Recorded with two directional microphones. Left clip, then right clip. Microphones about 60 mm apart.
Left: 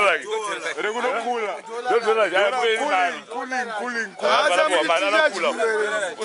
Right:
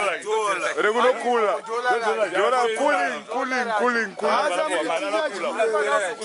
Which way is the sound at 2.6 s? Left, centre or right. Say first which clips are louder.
Left 1 dB; left.